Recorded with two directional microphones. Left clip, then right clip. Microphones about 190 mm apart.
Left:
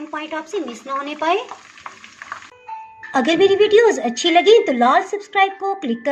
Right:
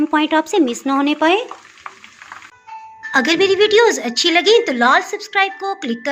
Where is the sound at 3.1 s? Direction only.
15° left (ahead or behind).